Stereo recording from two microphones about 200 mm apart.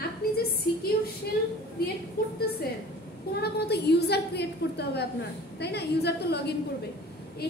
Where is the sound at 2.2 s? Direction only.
50° left (ahead or behind).